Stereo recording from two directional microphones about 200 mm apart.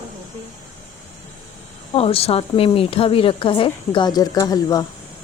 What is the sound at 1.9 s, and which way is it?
A woman's voice, 30° left (ahead or behind).